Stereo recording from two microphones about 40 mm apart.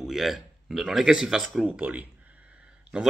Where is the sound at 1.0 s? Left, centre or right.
Centre.